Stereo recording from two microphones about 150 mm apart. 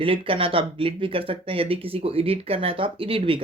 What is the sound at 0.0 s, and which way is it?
Speech, 35° right (ahead or behind).